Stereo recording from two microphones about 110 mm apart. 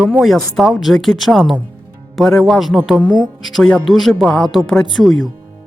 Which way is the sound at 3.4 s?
Centre (ahead or behind).